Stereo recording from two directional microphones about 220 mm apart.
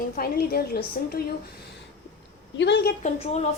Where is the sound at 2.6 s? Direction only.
50° left (ahead or behind).